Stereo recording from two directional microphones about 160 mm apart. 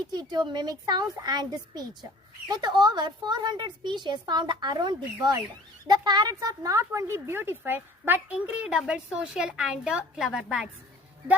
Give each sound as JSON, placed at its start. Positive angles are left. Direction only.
{"t": 0.1, "sound": "a woman's voice", "side_deg": -25}